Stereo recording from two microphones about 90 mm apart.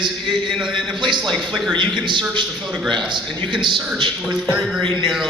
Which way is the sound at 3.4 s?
60° right (ahead or behind).